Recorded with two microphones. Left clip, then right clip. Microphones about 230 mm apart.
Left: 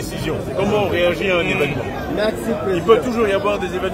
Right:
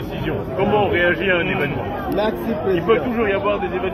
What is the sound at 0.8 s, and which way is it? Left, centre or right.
Speech, left.